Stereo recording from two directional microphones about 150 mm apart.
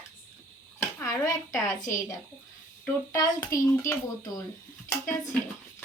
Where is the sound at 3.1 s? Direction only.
25° left (ahead or behind).